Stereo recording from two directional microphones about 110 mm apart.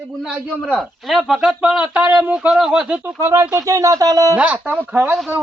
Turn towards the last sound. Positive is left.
turn(degrees=-15)  # may be behind; listen again after turning